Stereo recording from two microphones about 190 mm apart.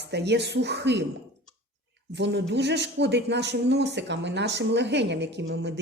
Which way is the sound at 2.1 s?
65° right (ahead or behind).